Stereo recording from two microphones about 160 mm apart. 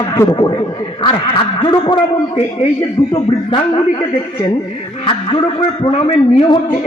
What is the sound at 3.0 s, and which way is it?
Speech, 25° left (ahead or behind).